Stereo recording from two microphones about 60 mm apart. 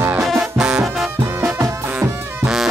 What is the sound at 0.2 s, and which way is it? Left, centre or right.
Music, centre.